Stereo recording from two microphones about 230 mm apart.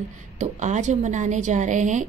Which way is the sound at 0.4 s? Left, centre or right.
Right.